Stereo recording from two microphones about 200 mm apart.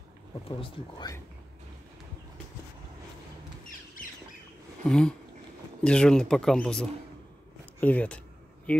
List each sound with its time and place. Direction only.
0.5 s speech: 25° left (ahead or behind)
4.8 s speech: 5° left (ahead or behind)